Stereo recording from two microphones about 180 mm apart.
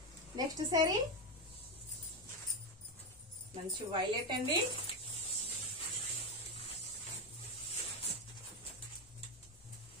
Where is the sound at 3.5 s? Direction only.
25° right (ahead or behind).